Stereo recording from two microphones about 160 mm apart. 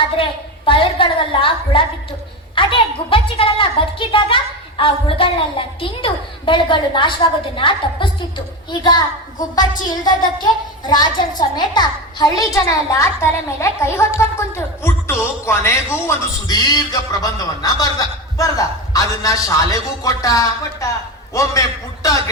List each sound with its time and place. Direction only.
0.2 s a woman's voice: 35° left (ahead or behind)